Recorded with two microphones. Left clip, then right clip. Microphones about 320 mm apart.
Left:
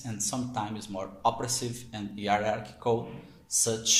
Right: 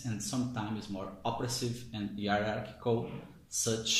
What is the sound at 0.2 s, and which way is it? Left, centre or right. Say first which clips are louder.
Speech: left 6 dB; centre.